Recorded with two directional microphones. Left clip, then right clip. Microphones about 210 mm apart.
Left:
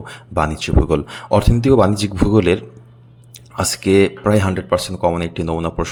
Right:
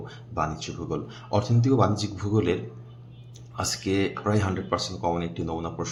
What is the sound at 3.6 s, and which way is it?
Speech, 40° left (ahead or behind).